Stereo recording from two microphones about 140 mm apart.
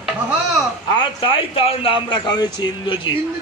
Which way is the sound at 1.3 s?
40° left (ahead or behind).